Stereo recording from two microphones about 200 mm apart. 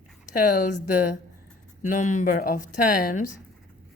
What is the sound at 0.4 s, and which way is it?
Speech, 40° left (ahead or behind).